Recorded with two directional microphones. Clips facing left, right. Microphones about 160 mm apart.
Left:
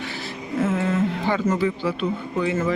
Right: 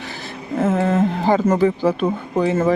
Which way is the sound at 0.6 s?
50° right (ahead or behind).